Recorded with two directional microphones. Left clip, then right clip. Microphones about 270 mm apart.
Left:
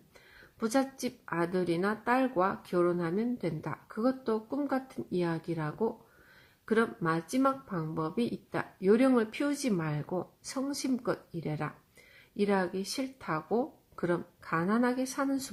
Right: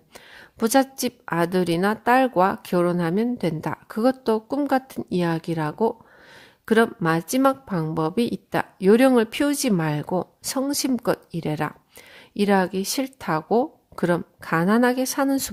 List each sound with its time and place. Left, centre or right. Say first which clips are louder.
0.1 s a woman's voice: right 12 dB; right